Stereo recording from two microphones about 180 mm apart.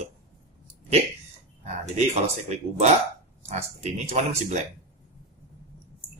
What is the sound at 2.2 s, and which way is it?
Speech, 40° right (ahead or behind).